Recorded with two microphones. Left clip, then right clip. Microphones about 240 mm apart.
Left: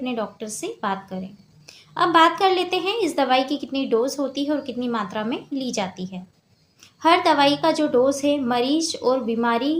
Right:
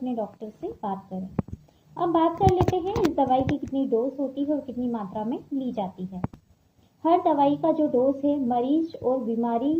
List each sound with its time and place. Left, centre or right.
0.0 s a woman's voice: left
2.0 s a woman's voice: left